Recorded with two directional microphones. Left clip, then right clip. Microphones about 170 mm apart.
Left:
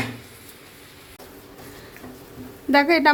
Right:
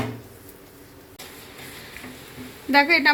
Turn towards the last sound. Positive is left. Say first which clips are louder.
# even
turn(degrees=55)  # may be behind; listen again after turning